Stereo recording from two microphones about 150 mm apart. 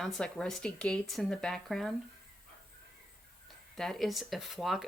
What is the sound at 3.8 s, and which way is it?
Speech, centre (ahead or behind).